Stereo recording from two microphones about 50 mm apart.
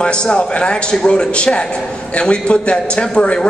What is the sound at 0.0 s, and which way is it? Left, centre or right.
A man's voice, centre.